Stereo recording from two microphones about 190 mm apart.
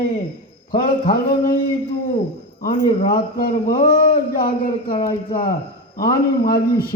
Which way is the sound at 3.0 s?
50° left (ahead or behind).